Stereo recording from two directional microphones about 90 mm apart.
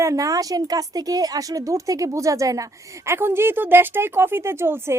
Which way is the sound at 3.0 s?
25° right (ahead or behind).